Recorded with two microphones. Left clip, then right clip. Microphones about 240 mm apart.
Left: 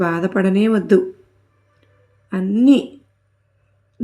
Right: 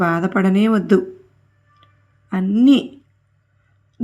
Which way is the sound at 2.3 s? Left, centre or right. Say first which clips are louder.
Even; right.